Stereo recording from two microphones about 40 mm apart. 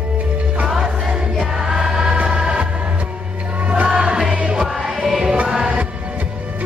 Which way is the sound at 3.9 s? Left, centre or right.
Right.